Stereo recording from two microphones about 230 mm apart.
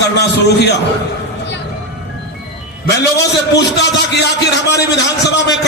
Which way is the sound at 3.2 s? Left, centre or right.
Left.